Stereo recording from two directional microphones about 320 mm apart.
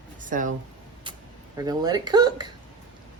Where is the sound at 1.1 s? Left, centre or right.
Centre.